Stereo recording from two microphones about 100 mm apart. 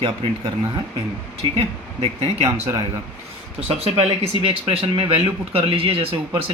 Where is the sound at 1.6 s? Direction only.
80° right.